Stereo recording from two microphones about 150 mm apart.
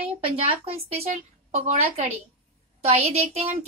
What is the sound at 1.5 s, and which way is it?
Speech, 45° right (ahead or behind).